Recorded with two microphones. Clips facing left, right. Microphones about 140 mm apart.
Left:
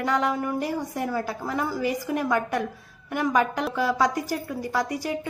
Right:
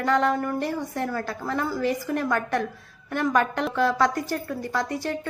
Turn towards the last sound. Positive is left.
turn(degrees=10)  # may be behind; listen again after turning